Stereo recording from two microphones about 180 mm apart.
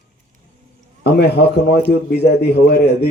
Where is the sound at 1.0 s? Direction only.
70° left (ahead or behind).